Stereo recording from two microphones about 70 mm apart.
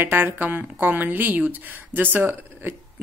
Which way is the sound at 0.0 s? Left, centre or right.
Right.